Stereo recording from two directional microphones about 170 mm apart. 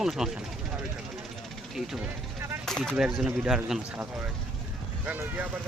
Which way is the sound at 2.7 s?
5° left (ahead or behind).